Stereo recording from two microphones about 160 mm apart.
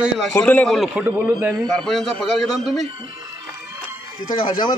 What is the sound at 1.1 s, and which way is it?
Speech, 15° right (ahead or behind).